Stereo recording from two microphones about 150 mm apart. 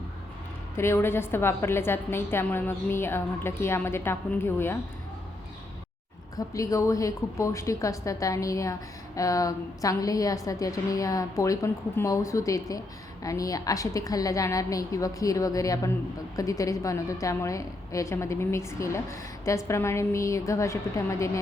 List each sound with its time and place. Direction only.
0.8 s a woman's voice: 15° left (ahead or behind)
6.3 s a woman's voice: 20° left (ahead or behind)